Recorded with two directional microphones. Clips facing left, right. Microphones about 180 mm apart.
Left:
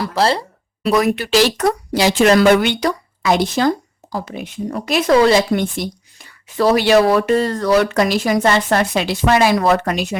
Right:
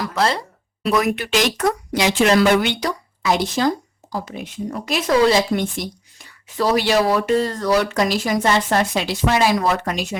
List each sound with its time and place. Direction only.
0.0 s speech: 30° left (ahead or behind); by 10.2 s 65° left (ahead or behind)